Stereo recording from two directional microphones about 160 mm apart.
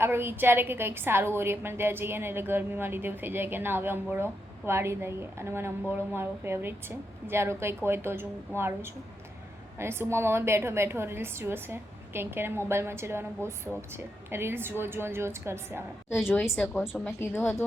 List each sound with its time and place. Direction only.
0.0 s a woman's voice: 15° right (ahead or behind)
16.2 s a woman's voice: 10° left (ahead or behind)
16.7 s a woman's voice: 5° right (ahead or behind)